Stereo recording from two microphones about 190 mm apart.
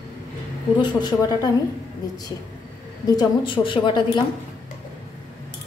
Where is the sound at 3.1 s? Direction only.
25° left (ahead or behind).